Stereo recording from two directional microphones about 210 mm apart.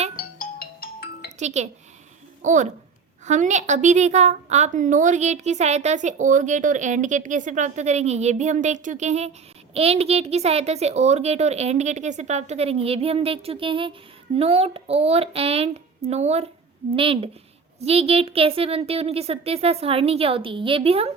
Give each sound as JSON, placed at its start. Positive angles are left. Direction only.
{"t": 0.2, "sound": "music", "side_deg": 45}
{"t": 1.4, "sound": "a woman's voice", "side_deg": -35}